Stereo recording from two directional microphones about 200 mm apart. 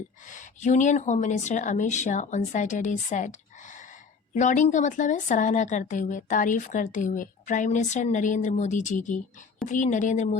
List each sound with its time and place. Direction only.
0.3 s speech: 40° left (ahead or behind)
4.4 s speech: 40° left (ahead or behind)